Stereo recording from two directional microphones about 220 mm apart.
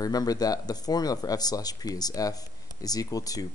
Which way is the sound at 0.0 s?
15° left (ahead or behind).